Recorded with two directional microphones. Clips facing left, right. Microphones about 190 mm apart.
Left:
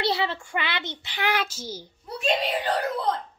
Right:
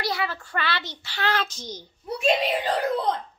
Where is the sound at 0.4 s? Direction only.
15° left (ahead or behind).